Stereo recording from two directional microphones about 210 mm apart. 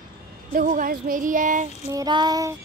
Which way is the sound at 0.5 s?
40° right (ahead or behind).